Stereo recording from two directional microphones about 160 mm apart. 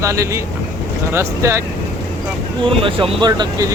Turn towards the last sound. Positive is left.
turn(degrees=-25)  # may be behind; listen again after turning